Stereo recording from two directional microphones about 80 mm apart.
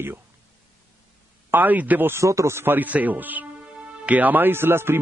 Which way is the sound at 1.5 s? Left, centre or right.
Right.